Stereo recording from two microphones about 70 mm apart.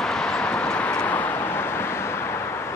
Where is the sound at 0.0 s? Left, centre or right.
Centre.